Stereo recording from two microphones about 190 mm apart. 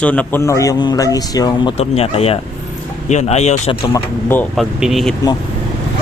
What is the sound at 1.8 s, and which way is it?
Speech, 30° left (ahead or behind).